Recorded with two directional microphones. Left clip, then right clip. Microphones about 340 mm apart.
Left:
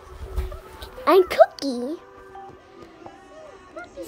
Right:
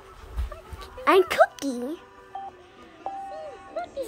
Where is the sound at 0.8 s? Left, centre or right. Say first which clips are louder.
Left 3 dB; centre.